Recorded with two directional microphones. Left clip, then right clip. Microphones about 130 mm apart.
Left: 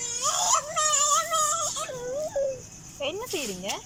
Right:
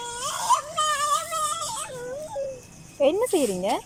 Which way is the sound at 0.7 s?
30° left (ahead or behind).